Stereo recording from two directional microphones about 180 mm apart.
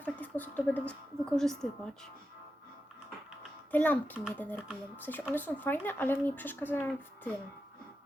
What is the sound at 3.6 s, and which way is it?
A woman's voice, 10° left (ahead or behind).